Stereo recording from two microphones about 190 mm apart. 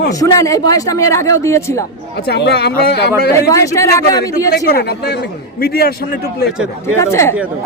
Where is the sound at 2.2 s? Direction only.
60° left (ahead or behind).